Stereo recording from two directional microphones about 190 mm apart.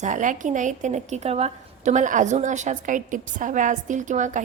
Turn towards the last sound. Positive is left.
turn(degrees=-40)  # may be behind; listen again after turning